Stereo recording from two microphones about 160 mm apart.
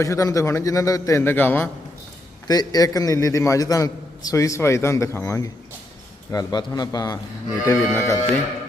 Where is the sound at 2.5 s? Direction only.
25° left (ahead or behind).